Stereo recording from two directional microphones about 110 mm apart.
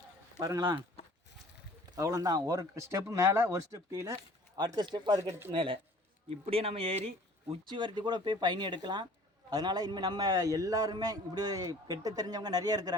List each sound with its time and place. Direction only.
0.3 s speech: 35° right (ahead or behind)
2.0 s speech: 35° right (ahead or behind)
5.5 s speech: 55° right (ahead or behind)
7.7 s speech: 45° right (ahead or behind)